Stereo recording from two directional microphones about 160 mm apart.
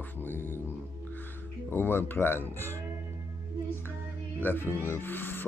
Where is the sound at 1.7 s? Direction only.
15° left (ahead or behind).